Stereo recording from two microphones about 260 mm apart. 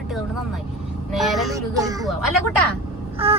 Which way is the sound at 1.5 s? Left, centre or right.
Centre.